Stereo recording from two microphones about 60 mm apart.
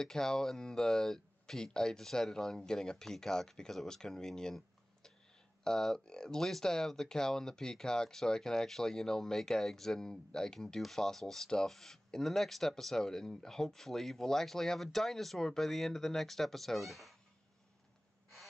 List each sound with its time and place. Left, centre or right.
0.0 s speech: centre